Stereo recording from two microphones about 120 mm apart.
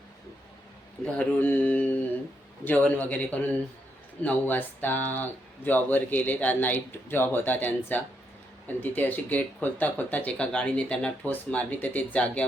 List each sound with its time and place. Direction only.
1.0 s speech: 15° left (ahead or behind)